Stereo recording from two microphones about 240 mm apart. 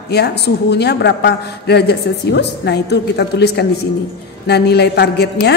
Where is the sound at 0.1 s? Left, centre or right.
Left.